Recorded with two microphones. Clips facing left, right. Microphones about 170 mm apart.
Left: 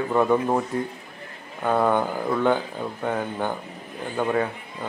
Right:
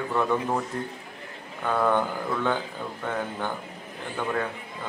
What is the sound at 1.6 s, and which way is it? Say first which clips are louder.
Speech: left 3 dB; 15° left (ahead or behind).